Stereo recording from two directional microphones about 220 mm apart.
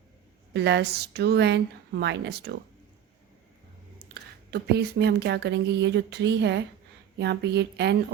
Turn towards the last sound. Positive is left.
turn(degrees=-50)  # may be behind; listen again after turning